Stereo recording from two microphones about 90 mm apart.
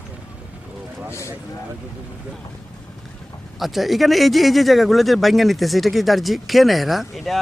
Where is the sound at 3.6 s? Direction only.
Centre (ahead or behind).